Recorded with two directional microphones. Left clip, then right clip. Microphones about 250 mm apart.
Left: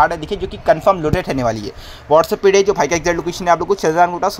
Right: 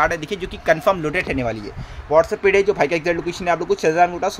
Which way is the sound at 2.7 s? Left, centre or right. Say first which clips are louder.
Left 3 dB; centre.